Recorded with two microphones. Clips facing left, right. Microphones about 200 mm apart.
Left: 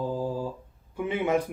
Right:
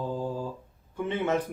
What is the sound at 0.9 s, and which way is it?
Speech, 10° left (ahead or behind).